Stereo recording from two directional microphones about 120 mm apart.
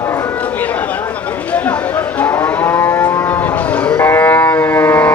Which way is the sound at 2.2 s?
10° left (ahead or behind).